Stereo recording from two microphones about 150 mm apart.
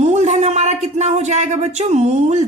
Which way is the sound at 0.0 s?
50° right (ahead or behind).